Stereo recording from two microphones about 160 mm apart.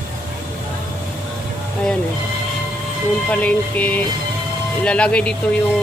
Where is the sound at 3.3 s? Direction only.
10° left (ahead or behind).